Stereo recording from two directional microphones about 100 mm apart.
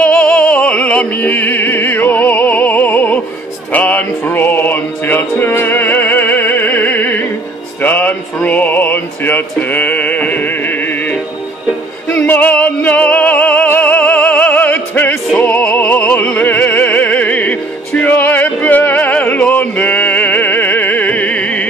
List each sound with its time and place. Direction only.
0.0 s music: 15° left (ahead or behind)
15.3 s opera: 15° left (ahead or behind)